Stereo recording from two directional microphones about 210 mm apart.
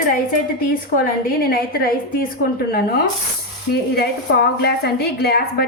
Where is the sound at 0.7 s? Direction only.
45° left (ahead or behind).